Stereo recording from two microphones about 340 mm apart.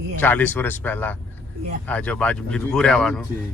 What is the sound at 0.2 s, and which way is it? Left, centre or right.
Speech, centre.